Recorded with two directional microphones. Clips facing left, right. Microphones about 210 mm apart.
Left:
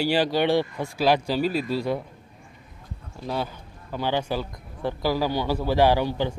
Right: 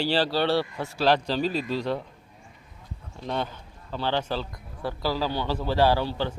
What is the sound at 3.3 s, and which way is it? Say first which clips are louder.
A man's voice: left 1 dB; 5° left (ahead or behind).